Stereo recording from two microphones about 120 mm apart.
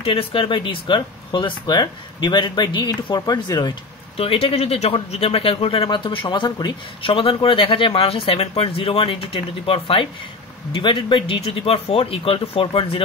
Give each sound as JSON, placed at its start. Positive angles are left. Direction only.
{"t": 0.0, "sound": "speech", "side_deg": 50}
{"t": 4.2, "sound": "speech", "side_deg": 55}